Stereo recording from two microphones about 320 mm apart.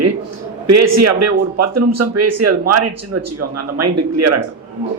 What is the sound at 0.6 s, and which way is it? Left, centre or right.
Speech, right.